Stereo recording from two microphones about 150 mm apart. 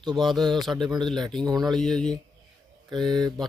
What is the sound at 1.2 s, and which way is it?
Speech, 25° right (ahead or behind).